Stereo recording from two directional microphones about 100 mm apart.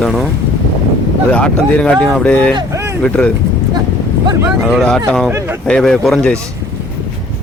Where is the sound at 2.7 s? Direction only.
30° right (ahead or behind).